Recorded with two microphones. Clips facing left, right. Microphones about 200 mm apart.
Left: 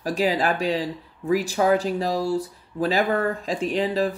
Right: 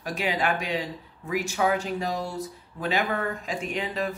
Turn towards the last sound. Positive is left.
turn(degrees=35)  # may be behind; listen again after turning